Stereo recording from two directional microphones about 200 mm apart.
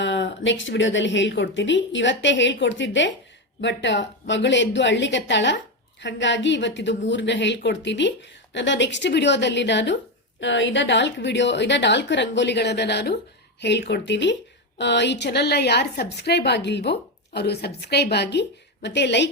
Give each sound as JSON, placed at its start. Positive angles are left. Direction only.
{"t": 0.0, "sound": "a woman's voice", "side_deg": 60}